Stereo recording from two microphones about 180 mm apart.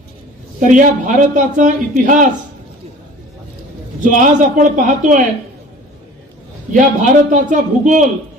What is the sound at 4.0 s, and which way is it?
A man's voice, 45° right (ahead or behind).